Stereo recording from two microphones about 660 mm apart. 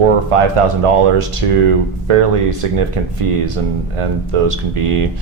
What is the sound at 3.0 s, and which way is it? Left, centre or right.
Speech, right.